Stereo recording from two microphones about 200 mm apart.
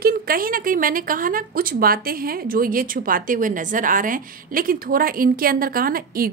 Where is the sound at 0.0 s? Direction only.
45° right (ahead or behind).